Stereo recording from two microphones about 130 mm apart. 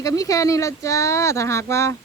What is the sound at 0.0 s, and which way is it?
Speech, 25° left (ahead or behind).